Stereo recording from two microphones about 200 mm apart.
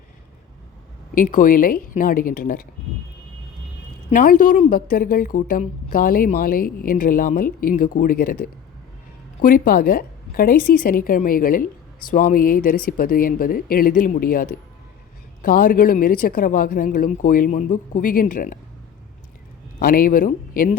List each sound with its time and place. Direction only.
1.1 s a woman's voice: 45° left (ahead or behind)
4.1 s a woman's voice: 40° left (ahead or behind)
19.8 s a woman's voice: 45° left (ahead or behind)